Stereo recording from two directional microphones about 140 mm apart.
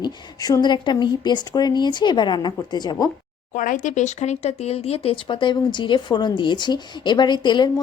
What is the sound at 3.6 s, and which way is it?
A woman's voice, 70° left (ahead or behind).